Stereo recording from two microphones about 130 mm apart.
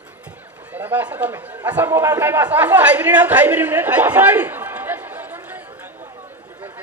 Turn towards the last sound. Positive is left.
turn(degrees=-15)  # may be behind; listen again after turning